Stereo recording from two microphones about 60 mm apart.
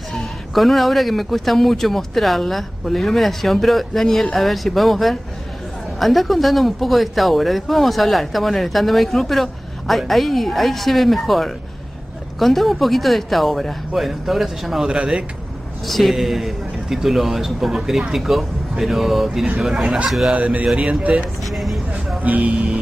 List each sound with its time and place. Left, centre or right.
0.1 s speech: centre
15.9 s speech: centre
20.2 s speech: right
21.5 s speech: centre
22.2 s speech: right